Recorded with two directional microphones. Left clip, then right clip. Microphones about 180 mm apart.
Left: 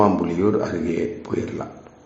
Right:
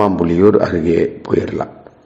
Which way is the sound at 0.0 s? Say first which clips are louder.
Right 7 dB; 35° right (ahead or behind).